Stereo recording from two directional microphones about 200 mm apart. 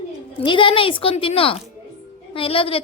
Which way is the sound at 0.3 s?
25° left (ahead or behind).